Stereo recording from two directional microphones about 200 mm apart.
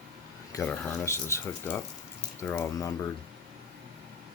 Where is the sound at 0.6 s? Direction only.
5° left (ahead or behind).